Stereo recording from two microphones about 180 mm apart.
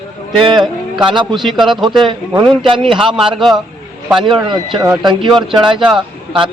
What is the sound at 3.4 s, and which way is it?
Speech, centre (ahead or behind).